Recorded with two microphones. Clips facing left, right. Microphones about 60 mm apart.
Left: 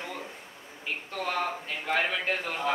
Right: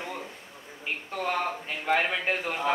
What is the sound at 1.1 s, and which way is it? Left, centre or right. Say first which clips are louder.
A man's voice: right 2 dB; centre.